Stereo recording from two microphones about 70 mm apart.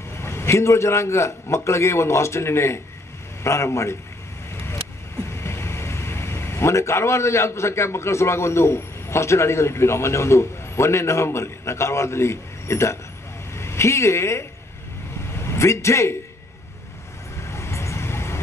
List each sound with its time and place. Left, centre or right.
0.2 s a man's voice: left
4.5 s vehicle: left
5.3 s a man's voice: left
17.4 s vehicle: left